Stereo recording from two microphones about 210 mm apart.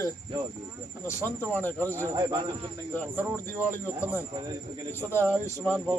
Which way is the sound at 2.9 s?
10° left (ahead or behind).